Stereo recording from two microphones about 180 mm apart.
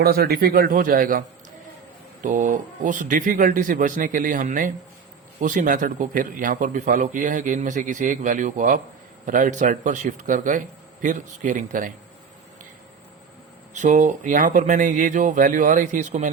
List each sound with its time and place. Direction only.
0.0 s a man's voice: 60° right (ahead or behind)
2.2 s a man's voice: 45° right (ahead or behind)
13.7 s a man's voice: 45° right (ahead or behind)